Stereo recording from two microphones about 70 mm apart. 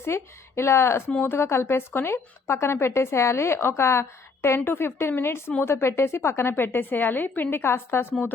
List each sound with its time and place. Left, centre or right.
0.0 s a woman's voice: left